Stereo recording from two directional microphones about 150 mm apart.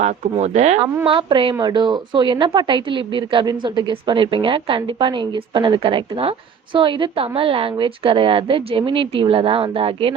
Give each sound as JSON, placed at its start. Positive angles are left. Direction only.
{"t": 0.0, "sound": "speech", "side_deg": -50}
{"t": 1.0, "sound": "a woman's voice", "side_deg": -35}